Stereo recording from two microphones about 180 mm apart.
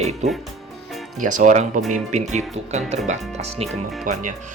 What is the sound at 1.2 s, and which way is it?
Speech, 45° right (ahead or behind).